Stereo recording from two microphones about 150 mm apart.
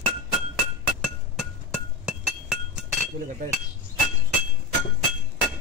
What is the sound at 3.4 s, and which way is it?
Hammer, 65° right (ahead or behind).